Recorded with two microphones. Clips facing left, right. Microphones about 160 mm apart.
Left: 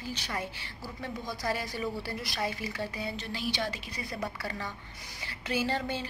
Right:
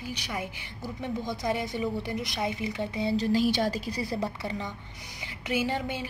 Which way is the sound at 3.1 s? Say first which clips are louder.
Right 11 dB; 40° right (ahead or behind).